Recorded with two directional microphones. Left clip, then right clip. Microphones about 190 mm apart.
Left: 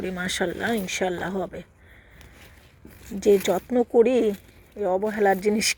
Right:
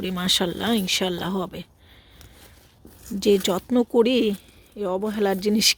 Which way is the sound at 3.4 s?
30° right (ahead or behind).